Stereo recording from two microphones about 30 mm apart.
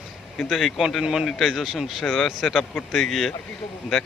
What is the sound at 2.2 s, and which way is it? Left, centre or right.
Speech, centre.